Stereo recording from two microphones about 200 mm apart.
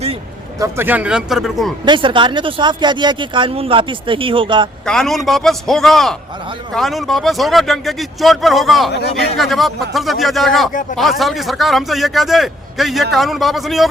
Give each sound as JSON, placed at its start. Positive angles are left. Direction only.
{"t": 0.6, "sound": "a man's voice", "side_deg": -10}
{"t": 1.8, "sound": "speech", "side_deg": -25}
{"t": 4.9, "sound": "a man's voice", "side_deg": 0}